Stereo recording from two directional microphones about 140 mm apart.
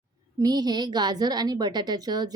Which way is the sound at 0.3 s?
30° right (ahead or behind).